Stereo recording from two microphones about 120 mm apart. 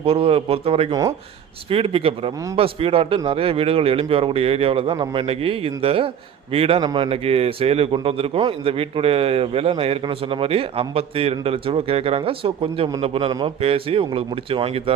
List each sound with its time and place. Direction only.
0.0 s a man's voice: 55° right (ahead or behind)